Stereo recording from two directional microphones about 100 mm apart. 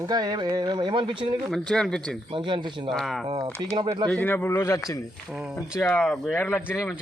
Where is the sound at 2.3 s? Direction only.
60° right (ahead or behind).